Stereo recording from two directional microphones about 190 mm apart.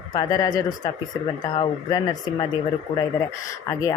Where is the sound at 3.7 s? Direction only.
15° left (ahead or behind).